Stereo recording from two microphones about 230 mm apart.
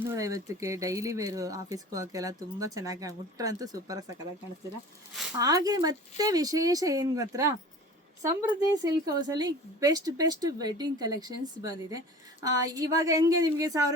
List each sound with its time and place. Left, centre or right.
0.0 s speech: centre
5.4 s speech: centre